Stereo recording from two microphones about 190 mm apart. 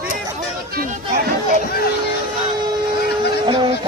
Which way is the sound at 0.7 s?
45° right (ahead or behind).